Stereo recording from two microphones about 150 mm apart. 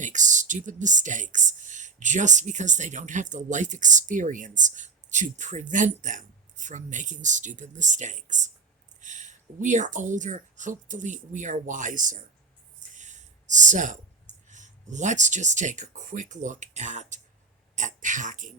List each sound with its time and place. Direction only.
0.0 s speech: 55° right (ahead or behind)